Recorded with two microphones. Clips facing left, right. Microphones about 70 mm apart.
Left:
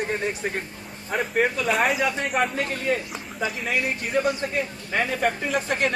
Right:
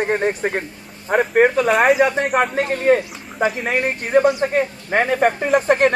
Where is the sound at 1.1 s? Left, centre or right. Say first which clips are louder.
Right 8 dB; right.